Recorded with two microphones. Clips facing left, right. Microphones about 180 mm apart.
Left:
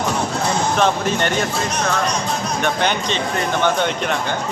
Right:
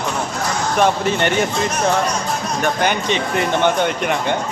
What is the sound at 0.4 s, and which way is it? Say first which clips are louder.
Basketball bounce: left 3 dB; 25° left (ahead or behind).